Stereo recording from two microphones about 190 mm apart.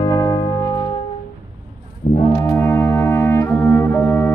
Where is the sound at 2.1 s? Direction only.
20° left (ahead or behind).